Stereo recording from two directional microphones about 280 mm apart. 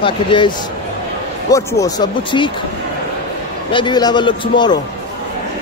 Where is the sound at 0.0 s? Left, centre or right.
Centre.